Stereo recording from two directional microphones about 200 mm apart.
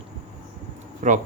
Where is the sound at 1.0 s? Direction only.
40° right (ahead or behind).